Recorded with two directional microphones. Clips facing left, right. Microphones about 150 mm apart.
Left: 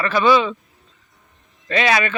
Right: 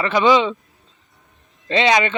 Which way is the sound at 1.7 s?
20° right (ahead or behind).